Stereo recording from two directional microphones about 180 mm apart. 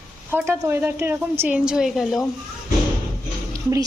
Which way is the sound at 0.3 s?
10° right (ahead or behind).